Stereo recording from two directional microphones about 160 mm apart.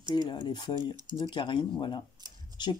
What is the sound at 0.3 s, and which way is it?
Speech, 30° left (ahead or behind).